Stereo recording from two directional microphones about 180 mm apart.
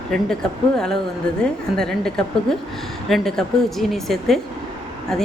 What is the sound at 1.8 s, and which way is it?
A woman's voice, 5° left (ahead or behind).